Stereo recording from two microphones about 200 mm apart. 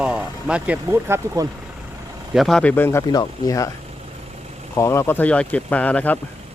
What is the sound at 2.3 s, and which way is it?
Speech, centre (ahead or behind).